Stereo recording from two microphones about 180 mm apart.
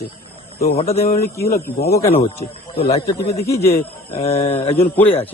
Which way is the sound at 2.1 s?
30° left (ahead or behind).